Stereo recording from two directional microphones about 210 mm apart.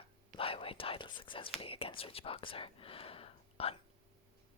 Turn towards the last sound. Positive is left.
turn(degrees=30)  # may be behind; listen again after turning